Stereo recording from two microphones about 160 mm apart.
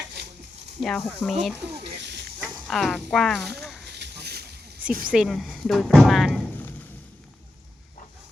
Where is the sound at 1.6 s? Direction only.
90° right.